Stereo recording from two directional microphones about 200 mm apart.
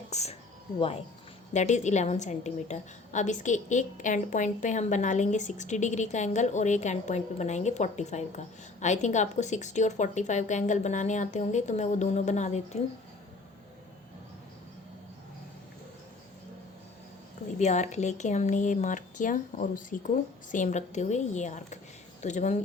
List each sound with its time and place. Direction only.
0.1 s a woman's voice: 35° left (ahead or behind)
17.6 s a woman's voice: 35° left (ahead or behind)